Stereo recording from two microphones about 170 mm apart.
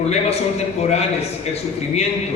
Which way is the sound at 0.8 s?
40° left (ahead or behind).